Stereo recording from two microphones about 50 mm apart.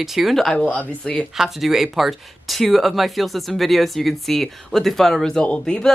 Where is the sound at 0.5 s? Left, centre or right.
Left.